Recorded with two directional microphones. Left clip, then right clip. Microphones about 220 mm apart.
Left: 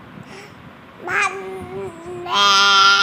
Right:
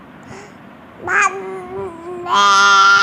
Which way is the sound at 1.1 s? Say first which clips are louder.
Right 5 dB; 10° left (ahead or behind).